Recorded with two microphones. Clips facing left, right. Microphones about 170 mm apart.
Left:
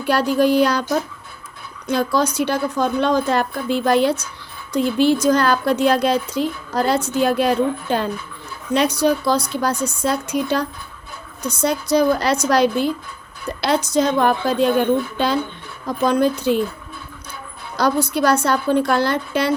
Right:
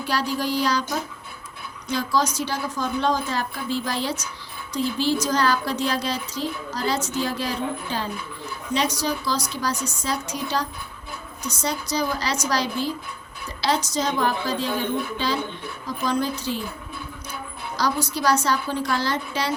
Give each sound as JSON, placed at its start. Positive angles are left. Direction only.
{"t": 0.0, "sound": "speech", "side_deg": 55}
{"t": 1.9, "sound": "speech", "side_deg": 55}
{"t": 17.7, "sound": "speech", "side_deg": 55}